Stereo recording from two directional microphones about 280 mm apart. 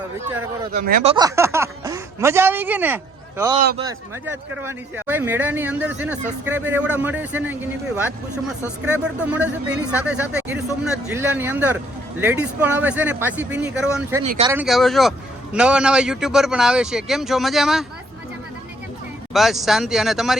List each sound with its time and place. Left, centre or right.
0.7 s speech: right
1.1 s speech: centre
14.3 s speech: right
14.5 s speech: centre
19.3 s speech: centre